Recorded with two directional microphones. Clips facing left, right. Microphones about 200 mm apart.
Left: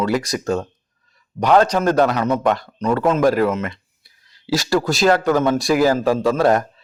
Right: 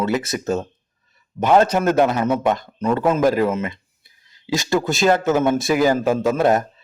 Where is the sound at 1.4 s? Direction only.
25° left (ahead or behind).